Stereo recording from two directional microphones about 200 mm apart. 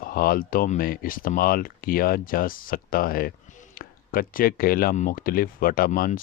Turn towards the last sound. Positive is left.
turn(degrees=45)  # may be behind; listen again after turning